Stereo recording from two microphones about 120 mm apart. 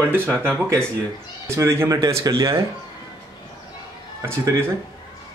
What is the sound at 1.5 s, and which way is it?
Speech, 25° right (ahead or behind).